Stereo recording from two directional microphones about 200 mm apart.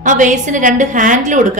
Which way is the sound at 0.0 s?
40° right (ahead or behind).